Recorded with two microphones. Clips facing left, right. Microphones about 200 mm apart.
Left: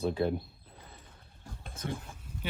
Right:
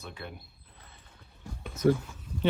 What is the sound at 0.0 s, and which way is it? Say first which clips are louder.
Speech: left 14 dB; 35° left (ahead or behind).